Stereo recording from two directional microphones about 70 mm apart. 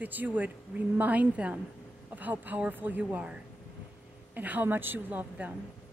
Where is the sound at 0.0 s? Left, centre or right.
Right.